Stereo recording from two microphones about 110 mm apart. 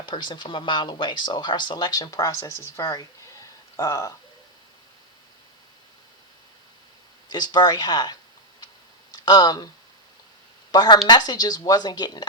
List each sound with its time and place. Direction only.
0.0 s speech: 45° left (ahead or behind)
7.3 s speech: 40° left (ahead or behind)
10.7 s speech: 40° left (ahead or behind)